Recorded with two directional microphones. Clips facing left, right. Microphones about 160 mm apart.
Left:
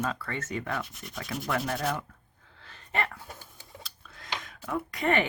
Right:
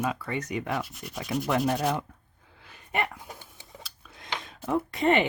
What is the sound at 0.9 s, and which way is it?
Sanding, centre (ahead or behind).